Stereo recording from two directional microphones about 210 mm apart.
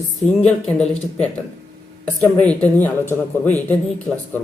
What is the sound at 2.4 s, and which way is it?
Speech, 5° left (ahead or behind).